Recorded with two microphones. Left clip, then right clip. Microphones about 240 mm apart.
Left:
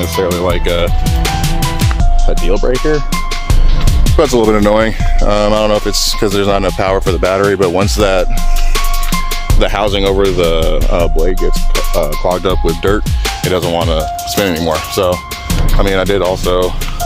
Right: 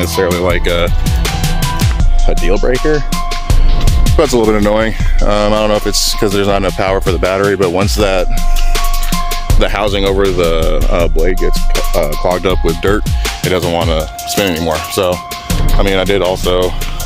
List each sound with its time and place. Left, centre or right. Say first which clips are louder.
0.4 s speech: right 1 dB; centre
1.0 s music: left 2 dB; centre
2.2 s speech: right 1 dB; centre
2.7 s speech: even; centre
14.4 s speech: even; centre